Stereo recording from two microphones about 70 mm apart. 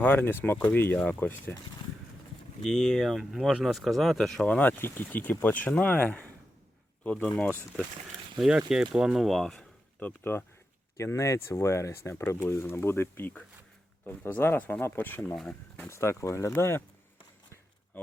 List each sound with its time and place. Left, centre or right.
0.0 s speech: left
2.6 s speech: centre
4.4 s speech: centre
7.7 s speech: centre
8.4 s speech: centre
9.2 s speech: centre
10.0 s speech: left
10.9 s speech: left
15.9 s speech: left